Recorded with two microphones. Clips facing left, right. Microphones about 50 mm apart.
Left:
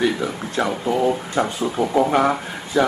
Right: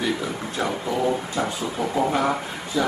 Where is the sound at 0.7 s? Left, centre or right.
Left.